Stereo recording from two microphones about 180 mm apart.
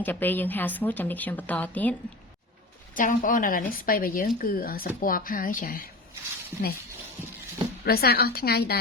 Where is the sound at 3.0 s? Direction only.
50° left (ahead or behind).